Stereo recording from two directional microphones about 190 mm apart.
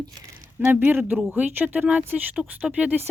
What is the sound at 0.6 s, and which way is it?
A woman's voice, 10° right (ahead or behind).